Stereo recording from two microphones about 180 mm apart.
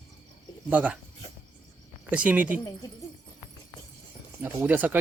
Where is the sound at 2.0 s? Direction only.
10° right (ahead or behind).